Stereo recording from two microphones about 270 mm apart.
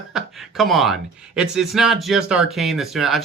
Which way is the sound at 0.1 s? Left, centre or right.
Centre.